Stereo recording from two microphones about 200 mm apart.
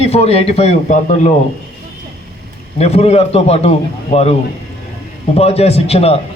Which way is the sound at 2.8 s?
30° left (ahead or behind).